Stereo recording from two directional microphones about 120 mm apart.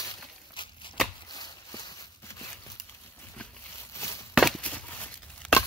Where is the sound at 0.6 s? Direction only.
40° left (ahead or behind); by 2.6 s 25° left (ahead or behind).